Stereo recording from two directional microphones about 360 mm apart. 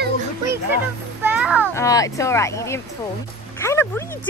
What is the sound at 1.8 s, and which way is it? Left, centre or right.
Speech, centre.